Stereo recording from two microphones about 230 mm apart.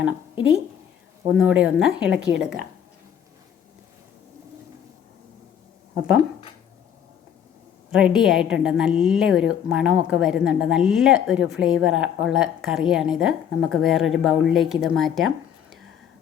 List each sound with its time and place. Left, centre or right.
1.3 s a woman's voice: centre
7.9 s a woman's voice: centre